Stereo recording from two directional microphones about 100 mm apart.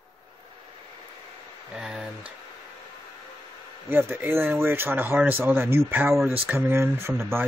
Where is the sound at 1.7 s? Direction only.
5° right (ahead or behind).